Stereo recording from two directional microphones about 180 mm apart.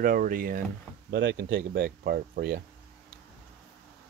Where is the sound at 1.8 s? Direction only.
55° right (ahead or behind).